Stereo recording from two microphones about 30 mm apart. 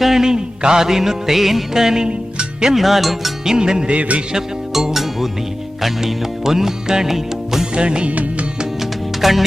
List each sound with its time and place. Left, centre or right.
0.2 s music: right; by 1.6 s centre
1.7 s music: centre
2.7 s music: centre
3.4 s music: right
3.9 s music: right
4.7 s music: centre
7.8 s music: right
8.0 s music: right
8.8 s music: centre